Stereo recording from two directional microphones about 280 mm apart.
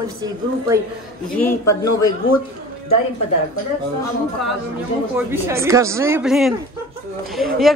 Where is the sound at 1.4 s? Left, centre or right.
Centre.